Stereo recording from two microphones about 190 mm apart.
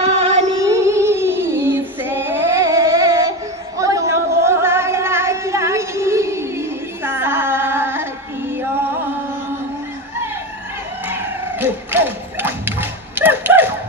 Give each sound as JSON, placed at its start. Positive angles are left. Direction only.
{"t": 0.0, "sound": "music", "side_deg": -35}
{"t": 0.6, "sound": "female singing", "side_deg": -15}
{"t": 11.1, "sound": "a sound", "side_deg": -10}